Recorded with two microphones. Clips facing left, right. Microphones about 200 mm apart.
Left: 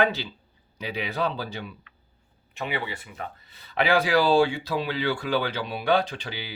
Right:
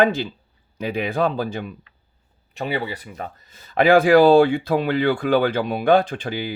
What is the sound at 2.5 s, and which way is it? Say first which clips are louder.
Speech: right 5 dB; 35° right (ahead or behind).